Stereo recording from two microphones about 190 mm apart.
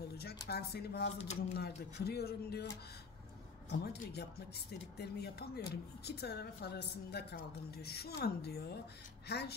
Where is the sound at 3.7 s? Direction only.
60° left (ahead or behind).